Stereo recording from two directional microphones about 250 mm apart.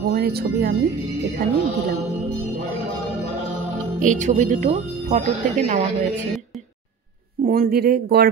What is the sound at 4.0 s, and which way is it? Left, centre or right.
Speech, right.